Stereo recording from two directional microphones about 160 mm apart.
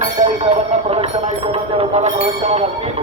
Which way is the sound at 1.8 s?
45° right (ahead or behind).